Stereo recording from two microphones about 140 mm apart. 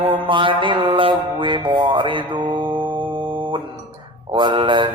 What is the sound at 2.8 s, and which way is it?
Music, 35° right (ahead or behind).